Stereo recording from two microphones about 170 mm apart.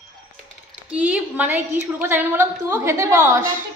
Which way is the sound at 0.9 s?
10° right (ahead or behind).